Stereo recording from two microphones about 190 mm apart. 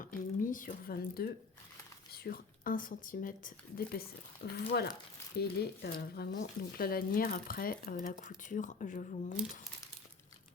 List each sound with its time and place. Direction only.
0.0 s speech: 45° left (ahead or behind)
4.4 s speech: 65° left (ahead or behind); by 9.4 s 45° left (ahead or behind)